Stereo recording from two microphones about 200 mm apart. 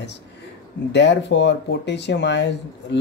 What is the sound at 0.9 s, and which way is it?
Speech, 60° left (ahead or behind).